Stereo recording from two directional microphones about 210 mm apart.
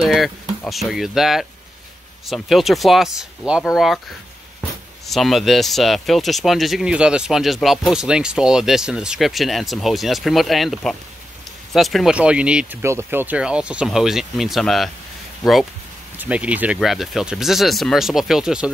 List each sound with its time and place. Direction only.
0.0 s speech: centre (ahead or behind)
5.0 s speech: centre (ahead or behind)
16.2 s speech: 5° right (ahead or behind)